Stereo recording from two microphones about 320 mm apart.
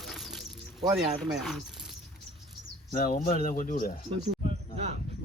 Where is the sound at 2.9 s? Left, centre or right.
Left.